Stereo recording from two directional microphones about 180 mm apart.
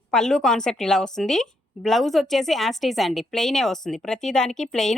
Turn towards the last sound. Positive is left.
turn(degrees=5)  # may be behind; listen again after turning